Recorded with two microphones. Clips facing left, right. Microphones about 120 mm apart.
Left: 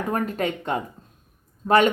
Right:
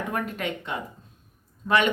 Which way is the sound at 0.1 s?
40° left (ahead or behind).